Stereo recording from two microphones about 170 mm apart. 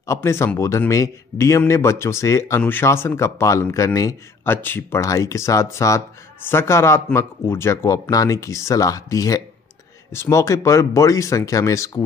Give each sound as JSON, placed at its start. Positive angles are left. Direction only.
{"t": 0.0, "sound": "a man's voice", "side_deg": 15}